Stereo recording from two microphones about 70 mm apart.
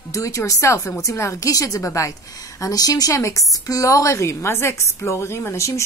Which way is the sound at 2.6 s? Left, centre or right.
Left.